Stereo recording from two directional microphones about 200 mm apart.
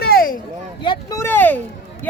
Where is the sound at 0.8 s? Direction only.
15° left (ahead or behind).